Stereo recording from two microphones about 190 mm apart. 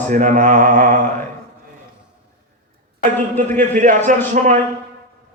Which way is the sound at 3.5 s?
40° right (ahead or behind).